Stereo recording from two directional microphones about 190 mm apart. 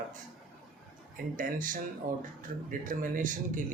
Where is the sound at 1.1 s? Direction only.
45° right (ahead or behind).